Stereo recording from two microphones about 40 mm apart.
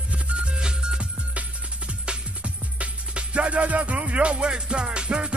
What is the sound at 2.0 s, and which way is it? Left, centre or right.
Music, right.